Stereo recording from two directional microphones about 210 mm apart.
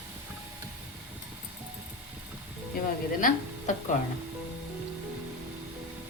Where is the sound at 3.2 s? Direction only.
40° left (ahead or behind).